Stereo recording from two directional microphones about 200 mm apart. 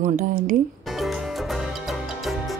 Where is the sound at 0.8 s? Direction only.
Centre (ahead or behind).